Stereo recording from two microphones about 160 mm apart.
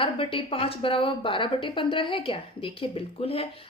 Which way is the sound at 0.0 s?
35° left (ahead or behind).